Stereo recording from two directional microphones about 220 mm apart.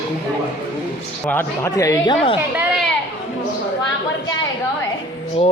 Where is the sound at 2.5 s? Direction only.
5° right (ahead or behind).